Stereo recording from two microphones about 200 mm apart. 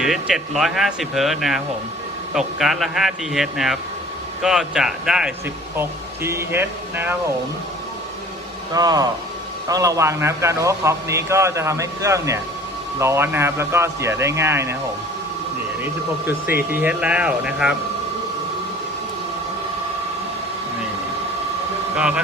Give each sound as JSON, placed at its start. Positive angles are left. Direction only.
{"t": 0.0, "sound": "a man's voice", "side_deg": 0}
{"t": 8.7, "sound": "a man's voice", "side_deg": -20}
{"t": 15.8, "sound": "speech", "side_deg": -10}
{"t": 21.9, "sound": "speech", "side_deg": -5}